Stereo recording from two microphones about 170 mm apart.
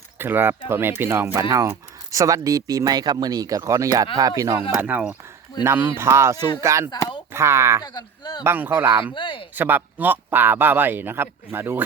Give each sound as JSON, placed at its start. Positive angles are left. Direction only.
{"t": 0.2, "sound": "speech", "side_deg": -15}
{"t": 4.8, "sound": "speech", "side_deg": -10}
{"t": 6.9, "sound": "a sound", "side_deg": 20}
{"t": 7.3, "sound": "speech", "side_deg": -15}
{"t": 7.9, "sound": "speech", "side_deg": 25}
{"t": 8.4, "sound": "speech", "side_deg": -10}
{"t": 9.1, "sound": "speech", "side_deg": 30}
{"t": 9.6, "sound": "speech", "side_deg": -10}